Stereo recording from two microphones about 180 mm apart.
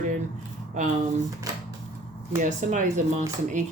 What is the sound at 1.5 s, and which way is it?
Typewriter, 20° right (ahead or behind).